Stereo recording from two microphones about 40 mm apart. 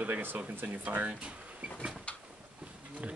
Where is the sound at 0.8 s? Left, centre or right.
Right.